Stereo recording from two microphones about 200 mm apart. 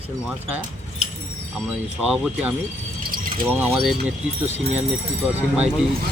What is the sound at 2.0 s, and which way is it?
Speech, 5° right (ahead or behind).